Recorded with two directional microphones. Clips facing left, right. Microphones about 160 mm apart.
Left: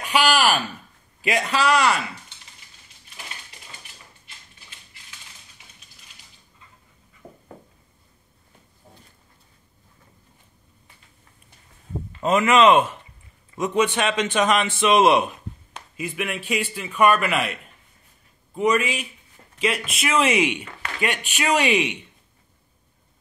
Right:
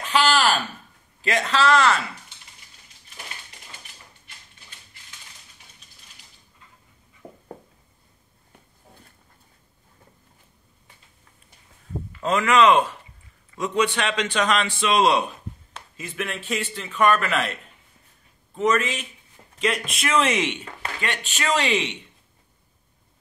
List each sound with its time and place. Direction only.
0.0 s a sound: 15° left (ahead or behind)
1.2 s a man's voice: 15° left (ahead or behind)
12.2 s a man's voice: 20° left (ahead or behind)
18.6 s a man's voice: 10° left (ahead or behind)